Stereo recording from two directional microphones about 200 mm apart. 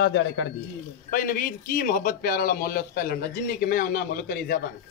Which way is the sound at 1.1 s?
45° left (ahead or behind).